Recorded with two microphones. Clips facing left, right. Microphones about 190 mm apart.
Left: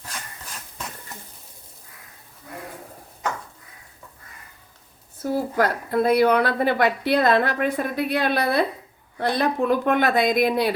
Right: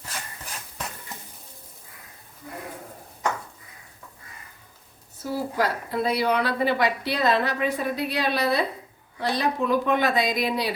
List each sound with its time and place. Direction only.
5.2 s a woman's voice: 50° left (ahead or behind)